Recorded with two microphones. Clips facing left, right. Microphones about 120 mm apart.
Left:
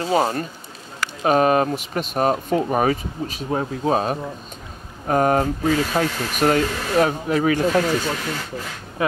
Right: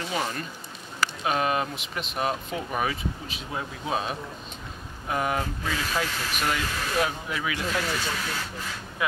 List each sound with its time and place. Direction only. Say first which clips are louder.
0.0 s speech: left 10 dB; 40° left (ahead or behind)